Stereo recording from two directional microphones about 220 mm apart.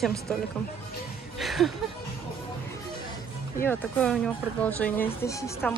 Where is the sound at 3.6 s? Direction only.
5° left (ahead or behind).